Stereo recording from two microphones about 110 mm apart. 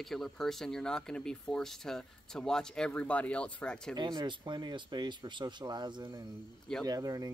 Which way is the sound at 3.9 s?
45° right (ahead or behind).